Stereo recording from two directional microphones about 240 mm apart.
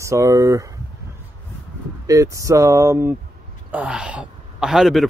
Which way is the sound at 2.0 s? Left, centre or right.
Centre.